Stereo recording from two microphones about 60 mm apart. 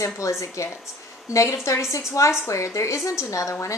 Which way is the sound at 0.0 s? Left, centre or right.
Left.